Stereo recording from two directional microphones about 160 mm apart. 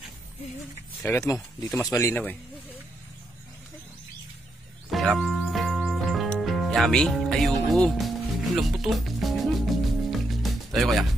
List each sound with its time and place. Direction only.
1.0 s speech: 15° left (ahead or behind)
1.7 s speech: centre (ahead or behind)
2.0 s a man's voice: 15° left (ahead or behind)
4.9 s music: centre (ahead or behind)